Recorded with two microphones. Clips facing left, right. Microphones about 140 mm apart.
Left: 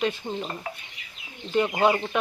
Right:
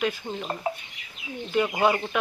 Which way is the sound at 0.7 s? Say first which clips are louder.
Right 7 dB; 25° right (ahead or behind).